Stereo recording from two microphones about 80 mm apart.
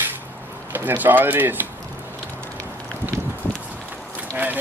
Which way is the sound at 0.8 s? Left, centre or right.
Right.